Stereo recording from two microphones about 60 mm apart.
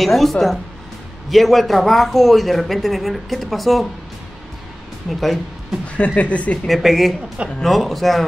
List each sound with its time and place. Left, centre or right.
0.0 s speech: centre
5.2 s speech: centre
5.9 s speech: left
6.7 s speech: centre